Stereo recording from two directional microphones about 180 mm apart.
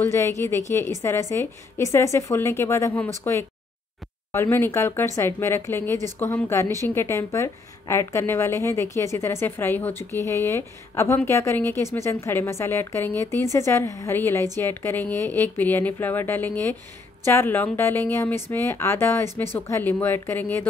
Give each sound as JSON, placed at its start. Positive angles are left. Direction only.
{"t": 0.1, "sound": "a woman's voice", "side_deg": 15}